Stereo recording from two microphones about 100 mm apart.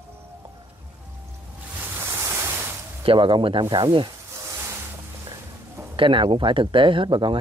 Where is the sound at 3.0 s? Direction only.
60° right (ahead or behind).